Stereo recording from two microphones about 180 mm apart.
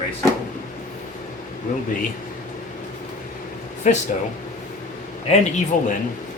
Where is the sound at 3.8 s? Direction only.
45° left (ahead or behind).